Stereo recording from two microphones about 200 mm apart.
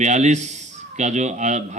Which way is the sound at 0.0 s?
35° right (ahead or behind).